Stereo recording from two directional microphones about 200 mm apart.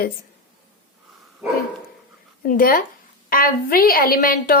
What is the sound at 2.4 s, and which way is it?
A woman's voice, 45° left (ahead or behind).